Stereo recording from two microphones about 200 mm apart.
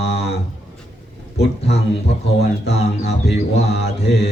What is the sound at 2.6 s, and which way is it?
Mantra, 60° left (ahead or behind).